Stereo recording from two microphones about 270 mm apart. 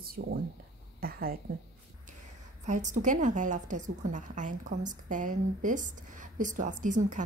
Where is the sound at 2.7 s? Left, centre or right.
Right.